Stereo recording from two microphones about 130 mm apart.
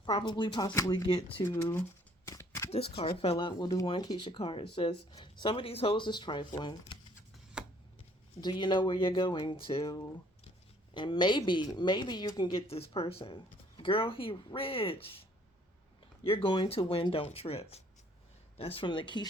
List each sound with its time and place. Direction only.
0.0 s speech: 35° left (ahead or behind); by 1.8 s 20° left (ahead or behind)
2.2 s a sound: 25° left (ahead or behind)
2.6 s speech: 50° left (ahead or behind)
7.6 s chopping: 5° right (ahead or behind)
8.4 s speech: 35° left (ahead or behind)
10.9 s speech: 35° left (ahead or behind)
16.2 s speech: 45° left (ahead or behind)